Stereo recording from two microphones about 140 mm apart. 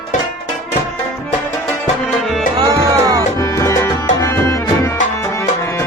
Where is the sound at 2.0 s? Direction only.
Centre (ahead or behind).